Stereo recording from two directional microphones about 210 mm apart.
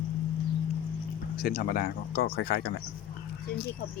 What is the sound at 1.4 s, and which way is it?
Speech, 45° left (ahead or behind).